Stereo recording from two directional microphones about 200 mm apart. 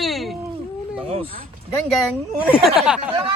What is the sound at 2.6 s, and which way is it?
Speech, centre (ahead or behind).